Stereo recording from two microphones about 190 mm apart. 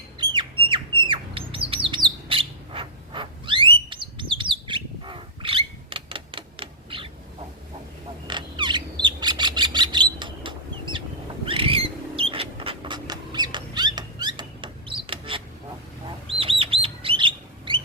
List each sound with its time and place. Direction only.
0.7 s bird: 25° right (ahead or behind)
8.3 s bird: 25° right (ahead or behind)
11.4 s mouse: 30° right (ahead or behind)
15.0 s bird: 25° right (ahead or behind)